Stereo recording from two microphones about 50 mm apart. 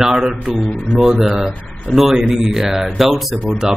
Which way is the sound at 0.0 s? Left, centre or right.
Centre.